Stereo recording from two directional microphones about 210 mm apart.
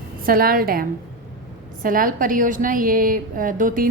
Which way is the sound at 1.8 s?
40° right (ahead or behind).